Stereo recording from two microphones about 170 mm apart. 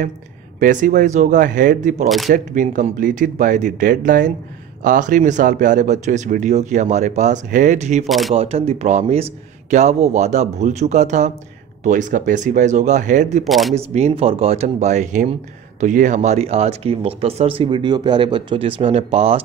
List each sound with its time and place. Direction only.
0.6 s speech: 50° right (ahead or behind)
8.1 s speech: centre (ahead or behind)
8.4 s speech: 35° right (ahead or behind)
13.4 s speech: centre (ahead or behind)
13.7 s speech: 40° right (ahead or behind)